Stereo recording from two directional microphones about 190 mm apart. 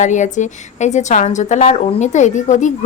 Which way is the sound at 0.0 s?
40° left (ahead or behind).